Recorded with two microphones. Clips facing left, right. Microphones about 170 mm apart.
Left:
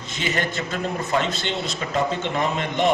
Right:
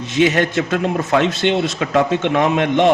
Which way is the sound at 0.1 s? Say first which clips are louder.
Right 11 dB; 75° right (ahead or behind).